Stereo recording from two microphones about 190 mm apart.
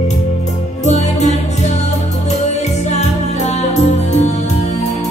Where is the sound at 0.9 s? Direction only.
35° left (ahead or behind).